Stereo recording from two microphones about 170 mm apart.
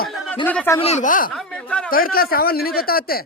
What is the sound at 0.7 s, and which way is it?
Speech, 40° left (ahead or behind).